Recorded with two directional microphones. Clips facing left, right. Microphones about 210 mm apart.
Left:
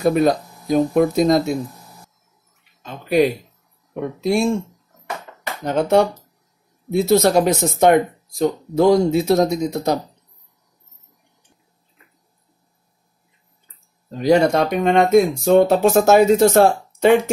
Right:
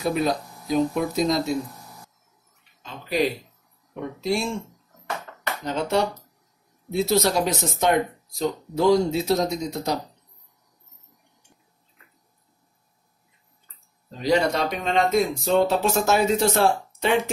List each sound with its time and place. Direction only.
0.0 s speech: 50° left (ahead or behind)
2.8 s speech: 55° left (ahead or behind)
5.7 s speech: 55° left (ahead or behind)
14.1 s speech: 50° left (ahead or behind)